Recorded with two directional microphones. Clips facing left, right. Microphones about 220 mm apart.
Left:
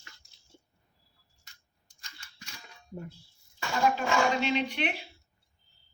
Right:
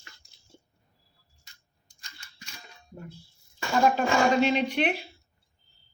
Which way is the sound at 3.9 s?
40° right (ahead or behind).